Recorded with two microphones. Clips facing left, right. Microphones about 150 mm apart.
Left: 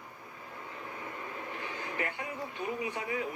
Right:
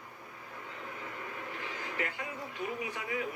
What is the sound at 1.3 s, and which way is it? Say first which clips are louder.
Speech: left 1 dB; 25° left (ahead or behind).